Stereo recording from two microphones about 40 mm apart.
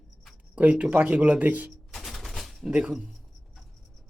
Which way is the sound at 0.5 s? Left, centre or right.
Right.